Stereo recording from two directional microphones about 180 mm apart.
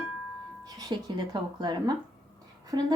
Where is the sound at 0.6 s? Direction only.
20° right (ahead or behind).